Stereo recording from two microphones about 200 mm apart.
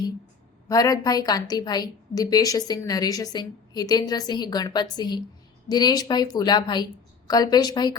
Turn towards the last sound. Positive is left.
turn(degrees=20)  # may be behind; listen again after turning